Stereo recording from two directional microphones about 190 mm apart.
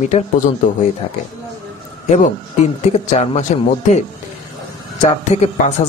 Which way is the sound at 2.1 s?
35° left (ahead or behind).